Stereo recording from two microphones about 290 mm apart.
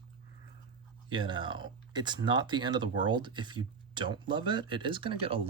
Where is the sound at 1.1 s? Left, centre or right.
Centre.